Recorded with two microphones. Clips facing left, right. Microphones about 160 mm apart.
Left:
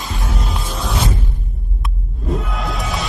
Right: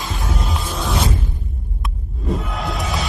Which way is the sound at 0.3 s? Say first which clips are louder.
Even; centre (ahead or behind).